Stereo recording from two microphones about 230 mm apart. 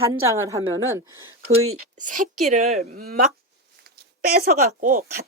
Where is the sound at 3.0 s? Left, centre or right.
Right.